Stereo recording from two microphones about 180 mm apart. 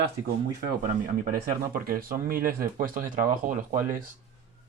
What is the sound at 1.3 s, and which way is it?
Speech, 55° right (ahead or behind).